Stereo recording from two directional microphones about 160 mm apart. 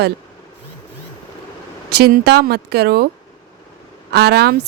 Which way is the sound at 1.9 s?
80° right.